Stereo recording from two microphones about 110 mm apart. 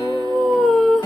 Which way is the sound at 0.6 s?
5° left (ahead or behind).